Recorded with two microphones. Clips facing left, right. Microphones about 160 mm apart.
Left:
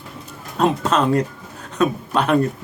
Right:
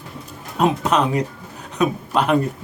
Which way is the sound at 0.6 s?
15° right (ahead or behind).